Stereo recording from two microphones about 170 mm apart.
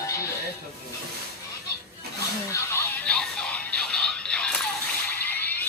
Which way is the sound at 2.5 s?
10° left (ahead or behind).